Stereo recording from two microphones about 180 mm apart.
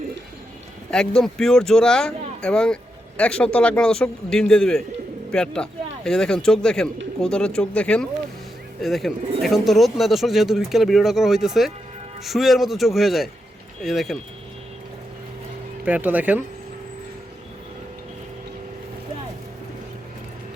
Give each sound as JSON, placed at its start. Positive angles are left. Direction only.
{"t": 0.9, "sound": "speech", "side_deg": 5}
{"t": 15.8, "sound": "speech", "side_deg": -10}